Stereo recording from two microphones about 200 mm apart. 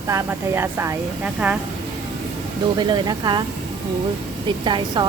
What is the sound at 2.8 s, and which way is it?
Speech, 20° right (ahead or behind).